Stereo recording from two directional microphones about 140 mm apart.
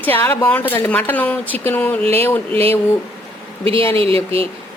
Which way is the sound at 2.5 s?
45° right (ahead or behind).